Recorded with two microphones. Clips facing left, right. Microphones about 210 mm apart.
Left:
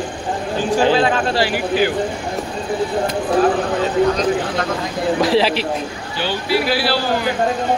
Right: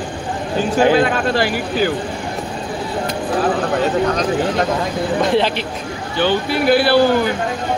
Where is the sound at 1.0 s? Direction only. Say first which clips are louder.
Right 1 dB; 50° right (ahead or behind).